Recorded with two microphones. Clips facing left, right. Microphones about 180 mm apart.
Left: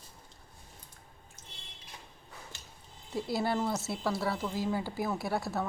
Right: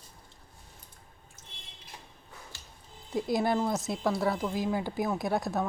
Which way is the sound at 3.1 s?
15° right (ahead or behind).